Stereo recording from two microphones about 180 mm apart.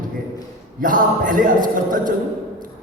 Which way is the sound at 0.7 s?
50° right (ahead or behind).